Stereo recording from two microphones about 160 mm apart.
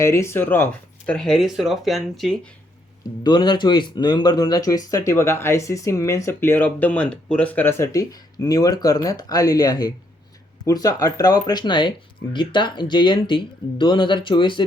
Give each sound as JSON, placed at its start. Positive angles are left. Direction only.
{"t": 0.0, "sound": "speech", "side_deg": 15}
{"t": 3.2, "sound": "speech", "side_deg": 30}